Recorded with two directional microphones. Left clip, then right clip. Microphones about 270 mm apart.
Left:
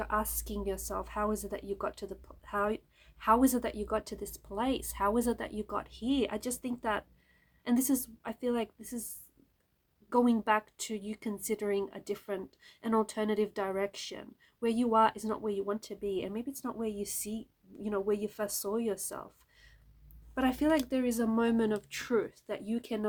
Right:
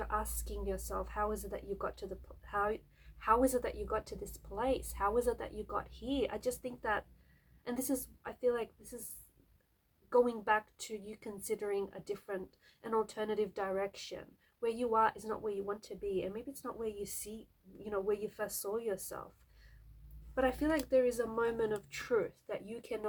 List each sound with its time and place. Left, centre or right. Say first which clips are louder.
0.0 s speech: left 5 dB; left
10.1 s speech: left 2 dB; left
20.3 s speech: left 3 dB; left